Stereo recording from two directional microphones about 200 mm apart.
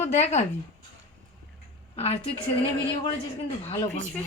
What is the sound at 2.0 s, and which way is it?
Speech, 30° left (ahead or behind).